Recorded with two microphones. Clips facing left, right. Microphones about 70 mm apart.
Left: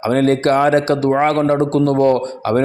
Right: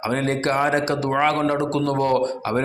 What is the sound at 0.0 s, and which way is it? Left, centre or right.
Speech, left.